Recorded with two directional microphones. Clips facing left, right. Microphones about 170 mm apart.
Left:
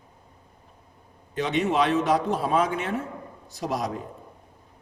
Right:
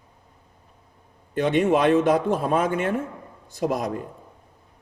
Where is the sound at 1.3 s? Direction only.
55° right (ahead or behind).